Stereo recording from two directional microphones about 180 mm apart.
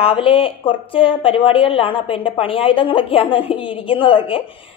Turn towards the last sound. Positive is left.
turn(degrees=30)  # may be behind; listen again after turning